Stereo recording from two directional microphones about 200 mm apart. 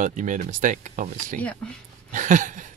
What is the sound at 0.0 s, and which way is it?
Speech, 40° right (ahead or behind).